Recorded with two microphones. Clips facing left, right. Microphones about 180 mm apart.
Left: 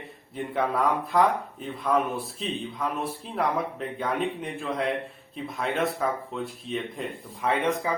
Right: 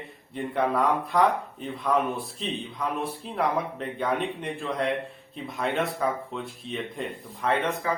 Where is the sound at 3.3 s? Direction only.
Centre (ahead or behind).